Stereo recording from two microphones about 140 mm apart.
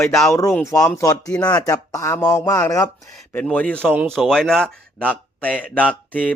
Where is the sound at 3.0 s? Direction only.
60° right (ahead or behind).